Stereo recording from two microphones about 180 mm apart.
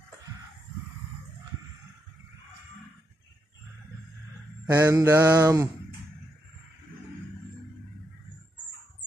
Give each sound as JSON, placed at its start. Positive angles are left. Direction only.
{"t": 4.6, "sound": "mantra", "side_deg": -20}